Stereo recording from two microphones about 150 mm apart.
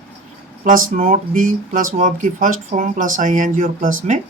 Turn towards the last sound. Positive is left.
turn(degrees=-60)  # may be behind; listen again after turning